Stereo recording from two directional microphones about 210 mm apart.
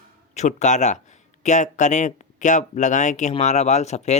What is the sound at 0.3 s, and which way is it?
Speech, 35° left (ahead or behind).